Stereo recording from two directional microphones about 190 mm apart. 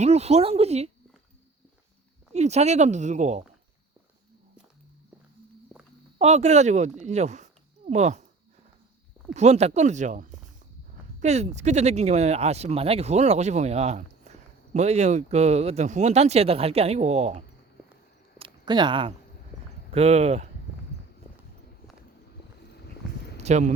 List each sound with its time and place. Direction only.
0.0 s speech: 35° right (ahead or behind)
2.3 s speech: 35° right (ahead or behind)
6.1 s speech: 35° right (ahead or behind)
9.3 s speech: 35° right (ahead or behind)
18.3 s a sound: 25° right (ahead or behind)
19.9 s speech: 35° right (ahead or behind)
23.4 s speech: 35° right (ahead or behind)